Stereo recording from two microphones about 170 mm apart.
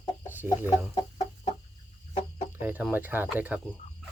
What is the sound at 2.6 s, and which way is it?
Speech, 10° right (ahead or behind).